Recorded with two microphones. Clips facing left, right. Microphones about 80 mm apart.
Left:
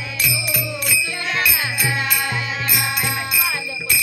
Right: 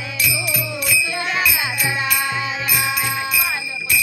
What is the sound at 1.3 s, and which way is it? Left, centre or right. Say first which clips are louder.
Music: left 1 dB; centre.